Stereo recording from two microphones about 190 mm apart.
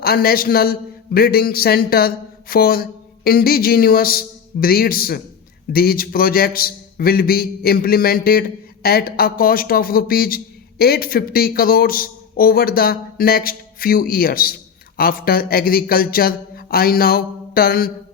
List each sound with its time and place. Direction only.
0.0 s a man's voice: 50° left (ahead or behind)